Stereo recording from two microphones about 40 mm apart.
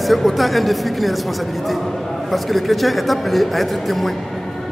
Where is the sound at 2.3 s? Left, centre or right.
Centre.